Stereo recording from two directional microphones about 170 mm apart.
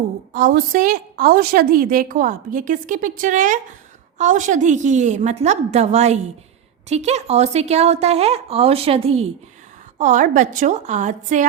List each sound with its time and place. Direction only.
0.3 s a woman's voice: 55° right (ahead or behind); by 9.2 s 35° right (ahead or behind)
10.0 s a woman's voice: 45° right (ahead or behind)